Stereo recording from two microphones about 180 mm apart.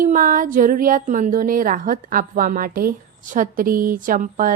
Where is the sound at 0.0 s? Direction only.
50° right (ahead or behind).